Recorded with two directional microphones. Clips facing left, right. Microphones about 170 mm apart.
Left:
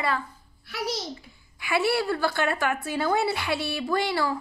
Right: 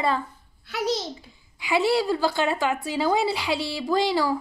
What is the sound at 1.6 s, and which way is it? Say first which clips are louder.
A woman's voice: right 3 dB; 15° right (ahead or behind).